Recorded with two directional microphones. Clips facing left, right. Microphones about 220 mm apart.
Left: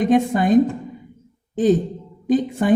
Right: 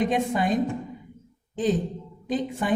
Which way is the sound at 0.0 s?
45° left (ahead or behind).